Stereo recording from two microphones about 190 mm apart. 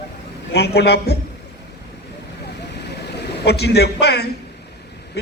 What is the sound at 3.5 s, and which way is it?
Speech, 60° left (ahead or behind).